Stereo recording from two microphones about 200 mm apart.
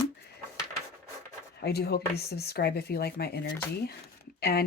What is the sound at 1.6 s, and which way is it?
Speech, 55° left (ahead or behind).